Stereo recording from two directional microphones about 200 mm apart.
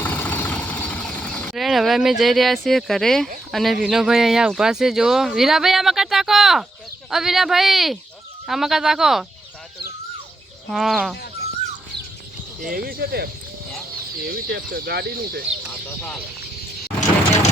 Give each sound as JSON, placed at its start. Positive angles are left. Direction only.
{"t": 0.0, "sound": "vehicle", "side_deg": 10}
{"t": 3.5, "sound": "speech", "side_deg": 0}
{"t": 10.7, "sound": "speech", "side_deg": 0}
{"t": 12.7, "sound": "speech", "side_deg": -50}